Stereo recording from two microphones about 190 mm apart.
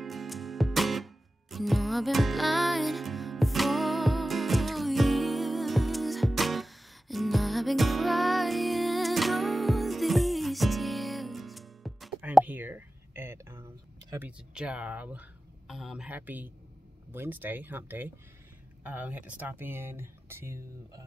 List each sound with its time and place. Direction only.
0.0 s music: centre (ahead or behind)
14.1 s speech: 5° right (ahead or behind)